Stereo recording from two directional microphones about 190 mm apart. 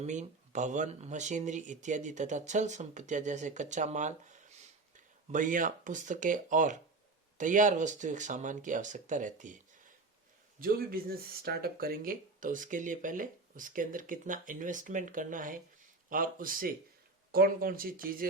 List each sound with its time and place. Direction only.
0.0 s speech: 40° right (ahead or behind)
10.6 s speech: 50° right (ahead or behind)